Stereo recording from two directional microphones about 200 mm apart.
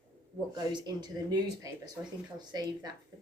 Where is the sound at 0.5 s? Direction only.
20° right (ahead or behind).